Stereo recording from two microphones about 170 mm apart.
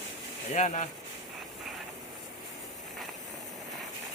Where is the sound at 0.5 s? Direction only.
45° left (ahead or behind).